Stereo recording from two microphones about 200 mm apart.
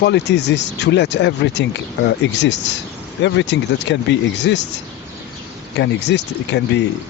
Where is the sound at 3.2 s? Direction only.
65° left (ahead or behind).